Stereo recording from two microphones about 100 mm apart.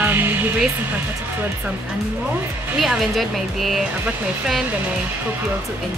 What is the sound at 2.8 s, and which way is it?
Speech, centre (ahead or behind).